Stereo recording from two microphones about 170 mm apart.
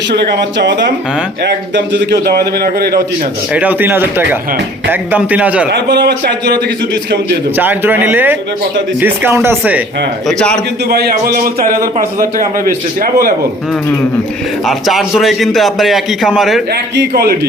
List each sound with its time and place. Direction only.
0.6 s a man's voice: 90° right; by 3.0 s 65° right (ahead or behind)
3.5 s speech: 10° right (ahead or behind)
5.7 s a man's voice: 75° right (ahead or behind)
7.5 s speech: 10° right (ahead or behind)
10.2 s a man's voice: 5° left (ahead or behind)
10.8 s a man's voice: 65° right (ahead or behind)
14.7 s a man's voice: centre (ahead or behind)
16.9 s a man's voice: 80° right